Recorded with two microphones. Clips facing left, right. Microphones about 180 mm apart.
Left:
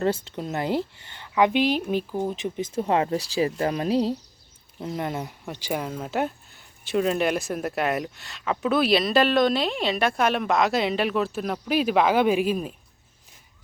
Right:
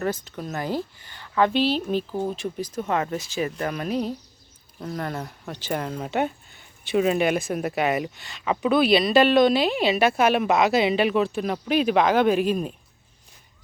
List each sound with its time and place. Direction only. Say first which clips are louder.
0.0 s speech: left 3 dB; 25° left (ahead or behind); by 12.7 s 5° left (ahead or behind)